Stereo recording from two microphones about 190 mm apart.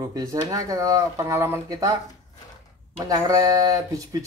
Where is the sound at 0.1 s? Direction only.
20° right (ahead or behind).